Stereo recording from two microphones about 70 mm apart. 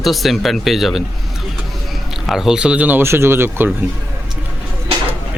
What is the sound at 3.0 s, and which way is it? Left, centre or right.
Speech, right.